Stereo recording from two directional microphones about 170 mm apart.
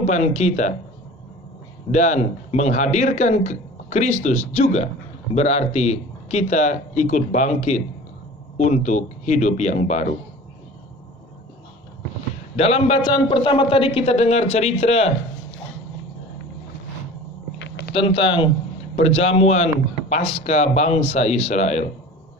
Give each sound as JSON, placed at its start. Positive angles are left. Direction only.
{"t": 0.0, "sound": "speech", "side_deg": 40}
{"t": 1.9, "sound": "a man's voice", "side_deg": 45}
{"t": 12.5, "sound": "a man's voice", "side_deg": 35}
{"t": 17.6, "sound": "a sound", "side_deg": 85}
{"t": 17.9, "sound": "a man's voice", "side_deg": 30}